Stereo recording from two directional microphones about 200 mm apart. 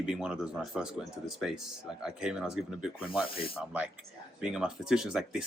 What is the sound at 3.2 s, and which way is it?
Speech, 25° left (ahead or behind).